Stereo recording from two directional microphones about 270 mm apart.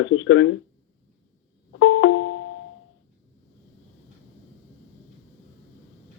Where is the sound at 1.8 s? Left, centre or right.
Left.